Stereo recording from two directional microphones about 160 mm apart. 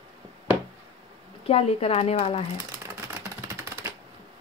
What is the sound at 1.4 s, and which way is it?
Speech, 40° left (ahead or behind).